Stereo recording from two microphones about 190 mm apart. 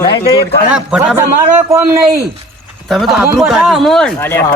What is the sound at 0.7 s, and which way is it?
Speech, 5° right (ahead or behind).